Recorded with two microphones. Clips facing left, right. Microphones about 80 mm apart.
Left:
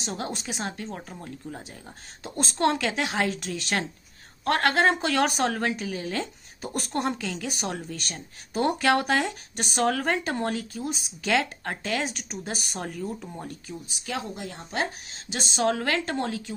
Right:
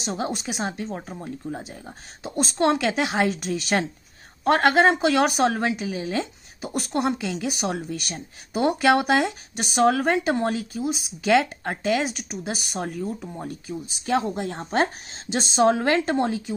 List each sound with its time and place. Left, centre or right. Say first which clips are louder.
0.0 s a woman's voice: right 5 dB; centre
13.8 s speech: right 10 dB; right
15.3 s a woman's voice: right 6 dB; right